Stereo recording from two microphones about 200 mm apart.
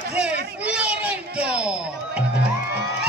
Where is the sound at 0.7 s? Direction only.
5° right (ahead or behind).